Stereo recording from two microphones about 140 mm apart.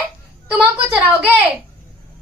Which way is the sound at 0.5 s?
15° right (ahead or behind).